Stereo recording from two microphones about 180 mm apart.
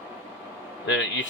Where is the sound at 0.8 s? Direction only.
90° left.